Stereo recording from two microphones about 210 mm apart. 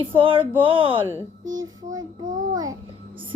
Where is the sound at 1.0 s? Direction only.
15° right (ahead or behind).